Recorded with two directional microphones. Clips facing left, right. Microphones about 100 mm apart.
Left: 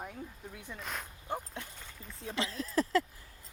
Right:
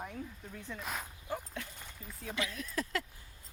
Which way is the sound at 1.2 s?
25° left (ahead or behind).